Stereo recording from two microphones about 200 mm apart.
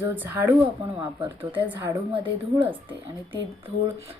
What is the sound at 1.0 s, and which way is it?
Speech, 20° right (ahead or behind).